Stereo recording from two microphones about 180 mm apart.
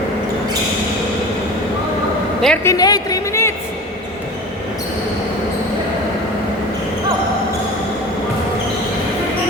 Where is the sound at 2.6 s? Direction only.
20° left (ahead or behind).